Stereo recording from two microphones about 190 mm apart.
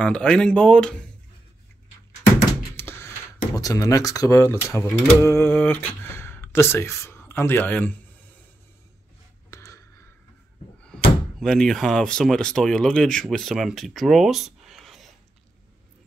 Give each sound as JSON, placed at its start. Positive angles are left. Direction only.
{"t": 0.0, "sound": "speech", "side_deg": 5}
{"t": 2.7, "sound": "thunk", "side_deg": 15}
{"t": 3.5, "sound": "speech", "side_deg": 15}
{"t": 9.5, "sound": "a sound", "side_deg": 15}
{"t": 10.8, "sound": "speech", "side_deg": 0}